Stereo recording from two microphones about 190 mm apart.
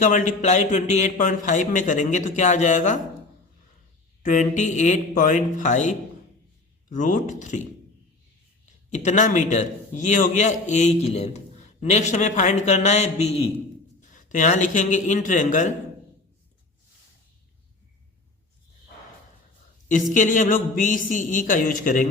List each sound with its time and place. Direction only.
0.0 s a man's voice: 40° left (ahead or behind)
4.2 s a man's voice: 40° left (ahead or behind)
8.9 s a man's voice: 40° left (ahead or behind)
20.1 s a man's voice: 40° left (ahead or behind)